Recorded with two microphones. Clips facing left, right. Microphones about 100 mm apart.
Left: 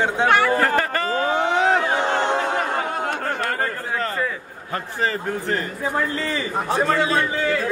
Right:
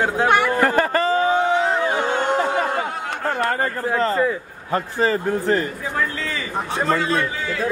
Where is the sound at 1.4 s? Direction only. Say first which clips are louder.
Even; 80° left.